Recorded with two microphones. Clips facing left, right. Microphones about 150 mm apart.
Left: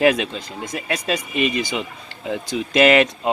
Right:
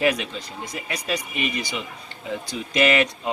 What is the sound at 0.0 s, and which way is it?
Speech, 90° left.